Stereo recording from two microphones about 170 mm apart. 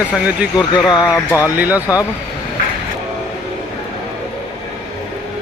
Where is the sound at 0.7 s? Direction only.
25° left (ahead or behind).